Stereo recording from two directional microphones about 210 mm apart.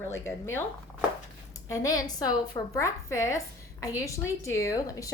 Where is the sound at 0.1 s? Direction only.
10° left (ahead or behind).